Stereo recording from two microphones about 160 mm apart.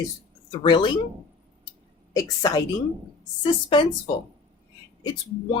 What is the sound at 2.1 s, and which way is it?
Speech, 25° left (ahead or behind).